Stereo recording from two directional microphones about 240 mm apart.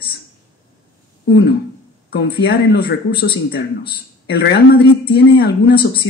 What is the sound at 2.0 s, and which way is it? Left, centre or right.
Speech, left.